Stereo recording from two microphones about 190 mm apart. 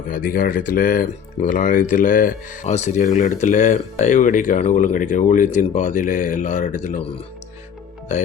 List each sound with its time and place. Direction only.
0.1 s speech: 45° left (ahead or behind)